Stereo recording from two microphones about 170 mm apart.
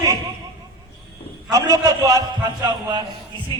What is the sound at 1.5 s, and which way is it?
A man's voice, 20° right (ahead or behind).